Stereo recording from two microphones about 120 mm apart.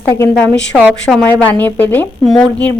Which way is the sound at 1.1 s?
Centre (ahead or behind).